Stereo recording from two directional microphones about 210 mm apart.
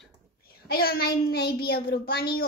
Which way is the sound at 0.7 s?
45° left (ahead or behind).